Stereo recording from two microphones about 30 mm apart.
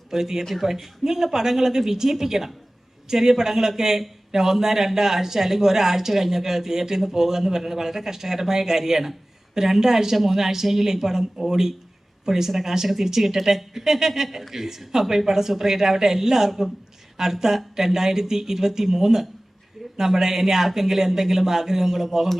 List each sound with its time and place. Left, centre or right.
0.1 s speech: centre
0.4 s speech: centre
14.3 s a woman's voice: centre